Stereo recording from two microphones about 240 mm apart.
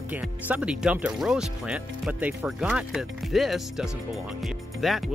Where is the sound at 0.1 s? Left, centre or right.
Centre.